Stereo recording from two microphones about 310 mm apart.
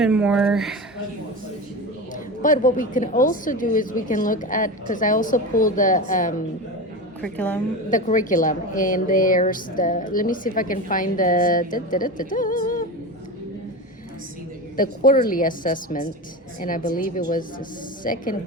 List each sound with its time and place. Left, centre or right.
0.0 s speech: centre
2.1 s a woman's voice: left
7.2 s speech: centre
7.9 s a woman's voice: left
14.8 s a woman's voice: left